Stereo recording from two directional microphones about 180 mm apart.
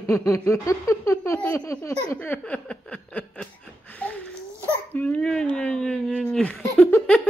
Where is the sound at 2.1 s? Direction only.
10° left (ahead or behind).